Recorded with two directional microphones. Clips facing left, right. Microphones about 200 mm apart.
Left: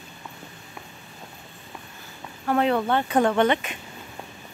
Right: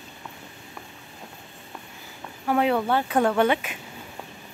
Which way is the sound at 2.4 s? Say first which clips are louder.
Even; 10° right (ahead or behind).